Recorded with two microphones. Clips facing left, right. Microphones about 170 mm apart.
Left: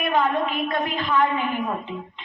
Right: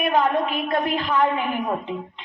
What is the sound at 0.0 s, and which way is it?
A woman's voice, 40° right (ahead or behind).